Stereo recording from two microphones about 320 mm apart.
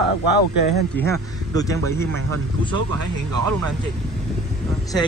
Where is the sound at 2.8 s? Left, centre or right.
Right.